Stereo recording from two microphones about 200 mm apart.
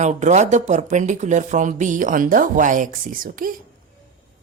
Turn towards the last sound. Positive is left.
turn(degrees=-45)  # may be behind; listen again after turning